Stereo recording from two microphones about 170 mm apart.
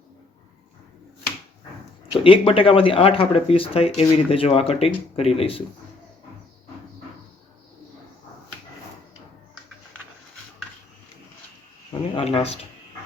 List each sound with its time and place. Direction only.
2.1 s speech: 30° left (ahead or behind)
12.1 s speech: 35° left (ahead or behind)